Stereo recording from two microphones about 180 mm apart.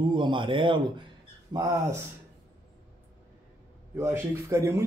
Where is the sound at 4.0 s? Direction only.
15° right (ahead or behind).